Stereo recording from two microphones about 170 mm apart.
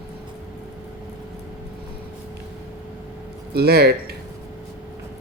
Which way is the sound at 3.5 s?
70° right (ahead or behind).